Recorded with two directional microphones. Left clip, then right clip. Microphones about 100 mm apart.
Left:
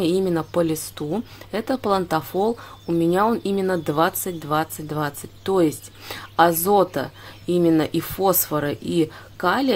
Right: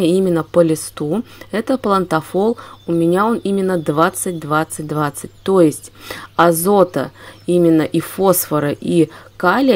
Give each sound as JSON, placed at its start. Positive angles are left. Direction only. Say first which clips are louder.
{"t": 0.0, "sound": "speech", "louder": "right 6 dB", "side_deg": -35}